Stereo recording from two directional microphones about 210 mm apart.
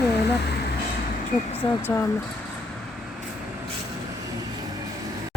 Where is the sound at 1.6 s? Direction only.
15° left (ahead or behind).